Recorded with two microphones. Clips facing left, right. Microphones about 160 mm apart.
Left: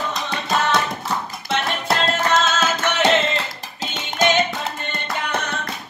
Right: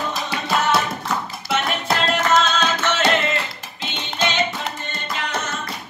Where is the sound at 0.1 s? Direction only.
5° right (ahead or behind).